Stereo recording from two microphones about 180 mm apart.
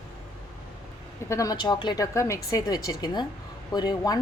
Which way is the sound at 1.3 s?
20° left (ahead or behind).